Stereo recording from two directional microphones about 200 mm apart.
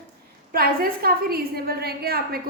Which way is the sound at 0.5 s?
50° right (ahead or behind).